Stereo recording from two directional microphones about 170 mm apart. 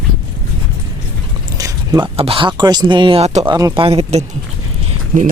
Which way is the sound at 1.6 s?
20° right (ahead or behind).